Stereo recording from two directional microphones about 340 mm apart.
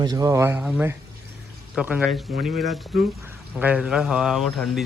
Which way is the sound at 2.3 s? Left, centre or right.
Right.